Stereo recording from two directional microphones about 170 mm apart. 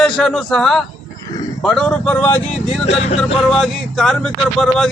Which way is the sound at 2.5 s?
45° left (ahead or behind).